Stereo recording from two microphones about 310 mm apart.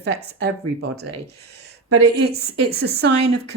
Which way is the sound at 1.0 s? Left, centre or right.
Right.